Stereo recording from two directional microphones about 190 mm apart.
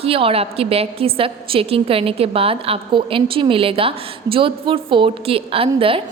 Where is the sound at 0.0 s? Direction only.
30° right (ahead or behind).